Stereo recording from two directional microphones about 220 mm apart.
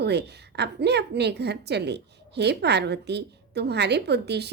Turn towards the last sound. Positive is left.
turn(degrees=-50)  # may be behind; listen again after turning